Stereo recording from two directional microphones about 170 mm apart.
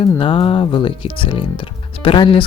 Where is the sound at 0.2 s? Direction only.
30° left (ahead or behind).